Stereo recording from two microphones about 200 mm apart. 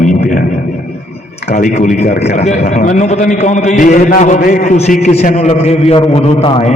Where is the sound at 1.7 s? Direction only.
35° left (ahead or behind).